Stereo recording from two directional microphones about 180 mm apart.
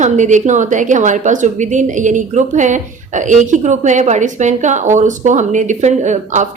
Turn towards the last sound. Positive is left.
turn(degrees=-40)  # may be behind; listen again after turning